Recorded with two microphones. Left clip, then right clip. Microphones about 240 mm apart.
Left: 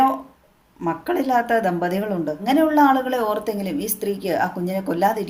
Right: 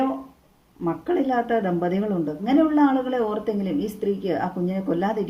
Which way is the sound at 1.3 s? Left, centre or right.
Left.